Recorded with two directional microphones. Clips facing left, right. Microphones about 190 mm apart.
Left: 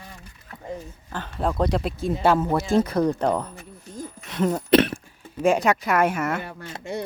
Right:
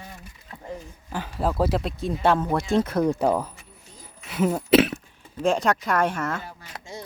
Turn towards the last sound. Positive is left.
turn(degrees=65)  # may be behind; listen again after turning